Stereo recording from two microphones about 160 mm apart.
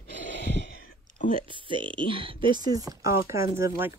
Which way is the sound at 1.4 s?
30° right (ahead or behind).